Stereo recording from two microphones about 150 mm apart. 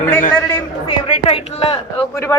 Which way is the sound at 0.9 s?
35° left (ahead or behind).